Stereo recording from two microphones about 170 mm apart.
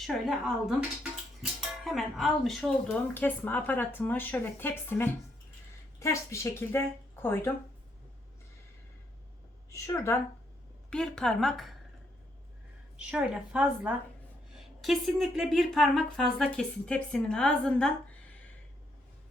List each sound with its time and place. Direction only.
0.0 s speech: centre (ahead or behind)
9.6 s speech: 15° left (ahead or behind)
10.8 s speech: 5° left (ahead or behind)
13.0 s a woman's voice: 5° right (ahead or behind)